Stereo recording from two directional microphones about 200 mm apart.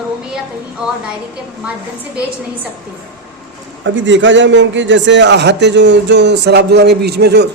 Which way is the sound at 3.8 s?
70° right (ahead or behind).